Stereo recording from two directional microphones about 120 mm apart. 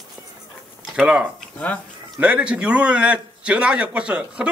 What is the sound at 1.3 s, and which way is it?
Speech, 10° left (ahead or behind).